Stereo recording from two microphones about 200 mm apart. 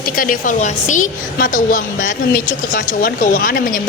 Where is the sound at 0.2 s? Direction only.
40° left (ahead or behind).